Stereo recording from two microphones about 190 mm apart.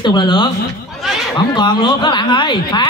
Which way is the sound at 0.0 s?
25° left (ahead or behind).